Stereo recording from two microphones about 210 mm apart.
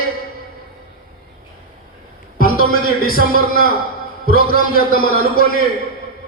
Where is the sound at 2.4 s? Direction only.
45° left (ahead or behind).